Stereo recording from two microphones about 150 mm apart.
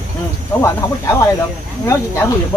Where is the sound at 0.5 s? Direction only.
15° left (ahead or behind).